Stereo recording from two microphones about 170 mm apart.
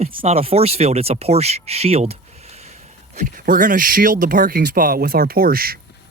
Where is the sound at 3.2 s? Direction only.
55° right (ahead or behind).